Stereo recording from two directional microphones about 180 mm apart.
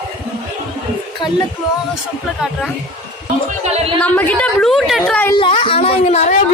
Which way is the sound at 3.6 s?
35° right (ahead or behind).